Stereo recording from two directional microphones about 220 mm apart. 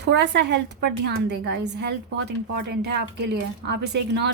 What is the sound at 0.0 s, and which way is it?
A woman's voice, 50° right (ahead or behind).